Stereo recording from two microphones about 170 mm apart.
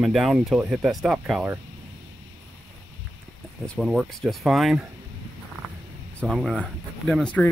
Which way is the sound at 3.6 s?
5° left (ahead or behind).